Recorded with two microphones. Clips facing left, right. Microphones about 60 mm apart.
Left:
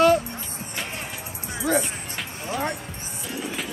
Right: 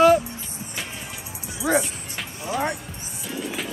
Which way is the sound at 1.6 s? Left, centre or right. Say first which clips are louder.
Right 2 dB; centre.